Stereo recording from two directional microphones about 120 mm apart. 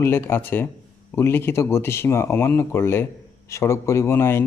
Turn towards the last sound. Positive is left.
turn(degrees=20)  # may be behind; listen again after turning